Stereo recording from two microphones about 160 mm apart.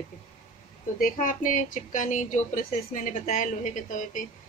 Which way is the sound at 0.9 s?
55° left (ahead or behind).